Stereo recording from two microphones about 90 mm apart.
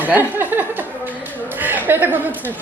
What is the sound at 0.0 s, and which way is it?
Speech, 20° right (ahead or behind).